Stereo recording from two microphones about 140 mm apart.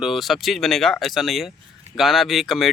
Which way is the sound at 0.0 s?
Centre (ahead or behind).